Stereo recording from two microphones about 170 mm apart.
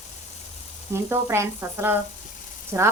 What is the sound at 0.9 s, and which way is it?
Speech, 15° right (ahead or behind).